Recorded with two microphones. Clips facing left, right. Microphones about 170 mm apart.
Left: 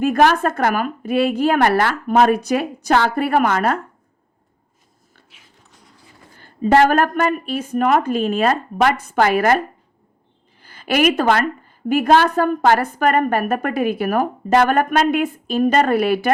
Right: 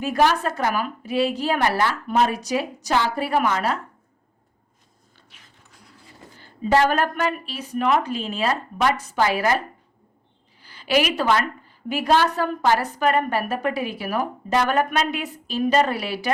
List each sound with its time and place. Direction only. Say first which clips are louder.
0.0 s a woman's voice: left 5 dB; 55° left (ahead or behind)
6.4 s a woman's voice: left 5 dB; 55° left (ahead or behind)